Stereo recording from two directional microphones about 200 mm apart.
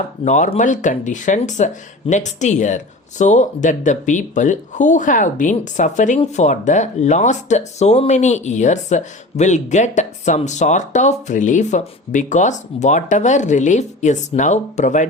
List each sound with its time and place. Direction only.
0.3 s speech: 35° left (ahead or behind)